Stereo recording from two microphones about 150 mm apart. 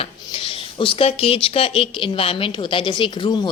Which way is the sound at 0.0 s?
40° left (ahead or behind).